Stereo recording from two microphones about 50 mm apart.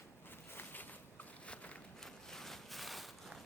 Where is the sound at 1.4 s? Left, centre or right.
Left.